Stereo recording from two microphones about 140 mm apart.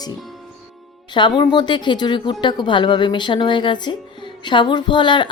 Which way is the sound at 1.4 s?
35° left (ahead or behind).